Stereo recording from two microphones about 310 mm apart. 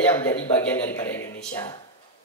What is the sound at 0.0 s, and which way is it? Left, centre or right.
A man's voice, centre.